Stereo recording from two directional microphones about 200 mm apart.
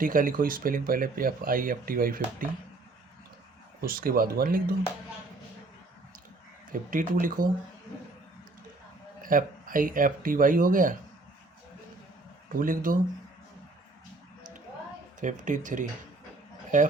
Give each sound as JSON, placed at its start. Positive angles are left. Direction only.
{"t": 0.0, "sound": "speech", "side_deg": -45}
{"t": 3.8, "sound": "speech", "side_deg": -45}
{"t": 6.7, "sound": "speech", "side_deg": -45}
{"t": 9.2, "sound": "speech", "side_deg": -45}
{"t": 12.5, "sound": "speech", "side_deg": -45}
{"t": 15.2, "sound": "speech", "side_deg": -40}